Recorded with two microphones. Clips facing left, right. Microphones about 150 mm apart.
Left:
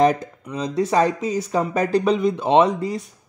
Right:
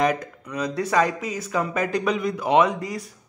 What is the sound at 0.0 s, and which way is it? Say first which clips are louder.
Speech: left 5 dB; 30° left (ahead or behind).